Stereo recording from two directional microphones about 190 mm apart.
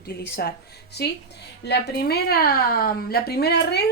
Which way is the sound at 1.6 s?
60° left (ahead or behind).